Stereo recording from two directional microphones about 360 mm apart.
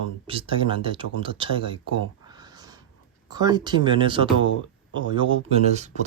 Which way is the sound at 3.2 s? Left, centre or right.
Centre.